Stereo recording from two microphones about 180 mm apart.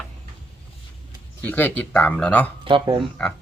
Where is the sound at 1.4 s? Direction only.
10° left (ahead or behind).